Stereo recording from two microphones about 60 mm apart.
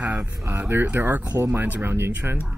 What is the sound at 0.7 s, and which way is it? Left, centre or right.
Speech, right.